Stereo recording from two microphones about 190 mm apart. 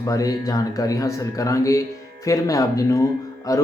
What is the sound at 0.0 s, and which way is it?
Speech, 20° left (ahead or behind).